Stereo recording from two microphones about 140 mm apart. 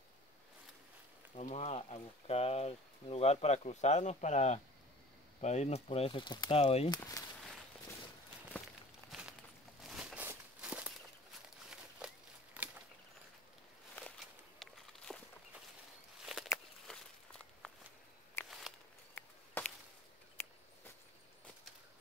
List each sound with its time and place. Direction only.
1.3 s speech: 50° left (ahead or behind); by 6.6 s 30° left (ahead or behind)
6.6 s speech: 45° left (ahead or behind)
9.8 s a sound: 5° right (ahead or behind)
10.2 s walk: 10° right (ahead or behind)
12.0 s a sound: 5° right (ahead or behind)
14.6 s walk: centre (ahead or behind)
16.3 s walk: centre (ahead or behind)
18.4 s walk: 15° left (ahead or behind)